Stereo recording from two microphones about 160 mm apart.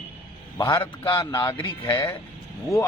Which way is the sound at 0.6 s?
25° left (ahead or behind).